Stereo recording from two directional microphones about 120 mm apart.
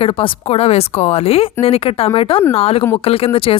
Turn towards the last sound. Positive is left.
turn(degrees=50)  # may be behind; listen again after turning